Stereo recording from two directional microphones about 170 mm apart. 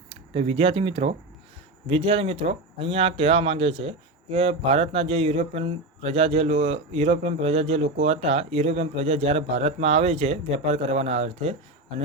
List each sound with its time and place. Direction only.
0.1 s speech: 35° right (ahead or behind)